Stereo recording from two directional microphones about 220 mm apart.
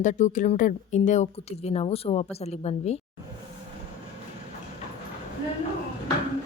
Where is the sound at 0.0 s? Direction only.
35° left (ahead or behind).